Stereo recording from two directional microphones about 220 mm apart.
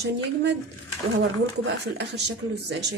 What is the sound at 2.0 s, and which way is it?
Speech, 50° right (ahead or behind).